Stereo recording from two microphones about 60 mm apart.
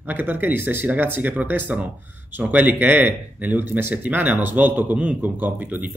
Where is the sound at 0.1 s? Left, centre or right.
Right.